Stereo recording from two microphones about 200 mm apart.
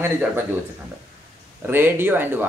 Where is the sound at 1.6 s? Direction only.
10° right (ahead or behind).